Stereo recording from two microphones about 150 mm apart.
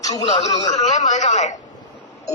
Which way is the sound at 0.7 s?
50° left (ahead or behind).